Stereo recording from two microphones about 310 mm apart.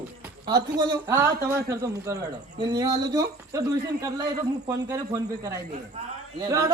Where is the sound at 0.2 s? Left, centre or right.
Centre.